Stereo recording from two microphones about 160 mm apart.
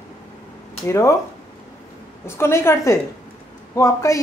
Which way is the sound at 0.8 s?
20° left (ahead or behind).